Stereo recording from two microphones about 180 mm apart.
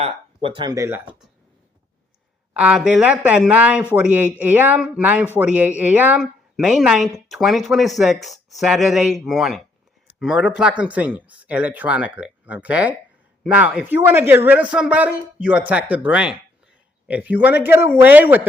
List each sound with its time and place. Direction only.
0.0 s speech: 30° right (ahead or behind); by 1.1 s 10° right (ahead or behind)
2.5 s a man's voice: 5° right (ahead or behind)